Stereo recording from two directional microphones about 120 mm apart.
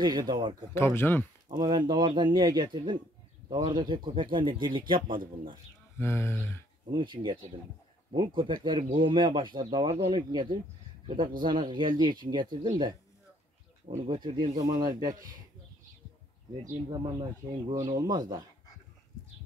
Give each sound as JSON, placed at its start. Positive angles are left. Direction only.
{"t": 0.0, "sound": "speech", "side_deg": -35}
{"t": 0.7, "sound": "speech", "side_deg": 20}
{"t": 1.5, "sound": "speech", "side_deg": -40}
{"t": 5.9, "sound": "speech", "side_deg": 20}
{"t": 6.9, "sound": "speech", "side_deg": -40}
{"t": 16.9, "sound": "speech", "side_deg": -35}